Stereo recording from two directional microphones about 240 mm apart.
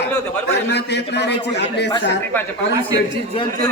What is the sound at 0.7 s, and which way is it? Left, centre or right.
A man's voice, left.